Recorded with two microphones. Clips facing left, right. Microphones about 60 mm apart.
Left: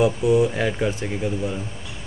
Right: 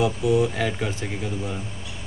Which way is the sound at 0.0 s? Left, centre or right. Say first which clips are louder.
Left 3 dB; left.